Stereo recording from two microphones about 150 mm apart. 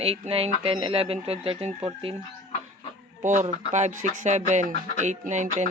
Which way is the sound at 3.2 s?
55° right (ahead or behind).